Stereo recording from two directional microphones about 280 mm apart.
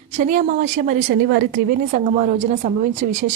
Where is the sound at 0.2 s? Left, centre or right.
Right.